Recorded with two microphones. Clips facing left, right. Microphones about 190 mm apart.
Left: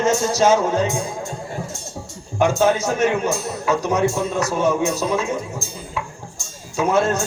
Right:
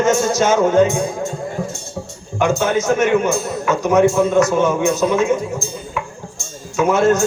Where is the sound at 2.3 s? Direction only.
35° left (ahead or behind).